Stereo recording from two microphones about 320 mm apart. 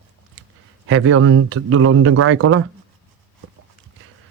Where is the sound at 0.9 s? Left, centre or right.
Right.